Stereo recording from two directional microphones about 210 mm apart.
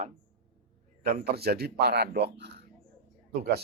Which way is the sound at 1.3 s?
50° right (ahead or behind).